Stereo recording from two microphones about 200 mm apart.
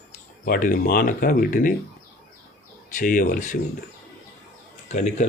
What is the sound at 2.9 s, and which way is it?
Speech, 40° left (ahead or behind).